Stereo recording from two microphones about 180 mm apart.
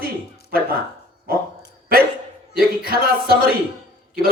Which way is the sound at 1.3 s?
55° right (ahead or behind).